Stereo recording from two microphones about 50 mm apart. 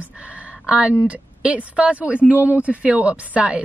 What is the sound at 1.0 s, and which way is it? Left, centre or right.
A woman's voice, right.